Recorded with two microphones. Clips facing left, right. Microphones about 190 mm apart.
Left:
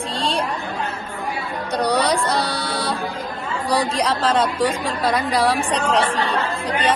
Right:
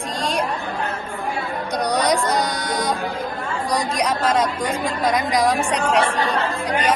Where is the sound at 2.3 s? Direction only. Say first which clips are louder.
Right 1 dB; 15° right (ahead or behind).